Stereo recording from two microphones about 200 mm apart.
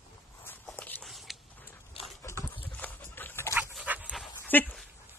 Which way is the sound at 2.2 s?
15° left (ahead or behind).